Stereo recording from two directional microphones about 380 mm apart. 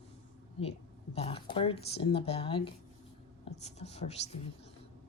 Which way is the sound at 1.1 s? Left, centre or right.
Centre.